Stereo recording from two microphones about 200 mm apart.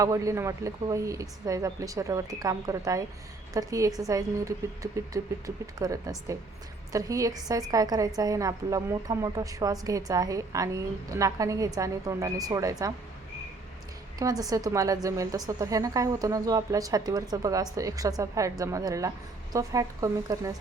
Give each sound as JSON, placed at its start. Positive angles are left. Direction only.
{"t": 0.0, "sound": "a woman's voice", "side_deg": -15}
{"t": 14.2, "sound": "a woman's voice", "side_deg": -20}